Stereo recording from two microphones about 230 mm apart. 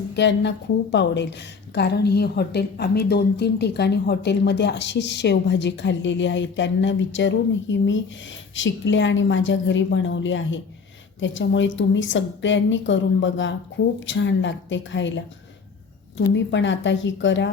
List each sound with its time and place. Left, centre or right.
0.2 s a woman's voice: left
16.3 s a woman's voice: left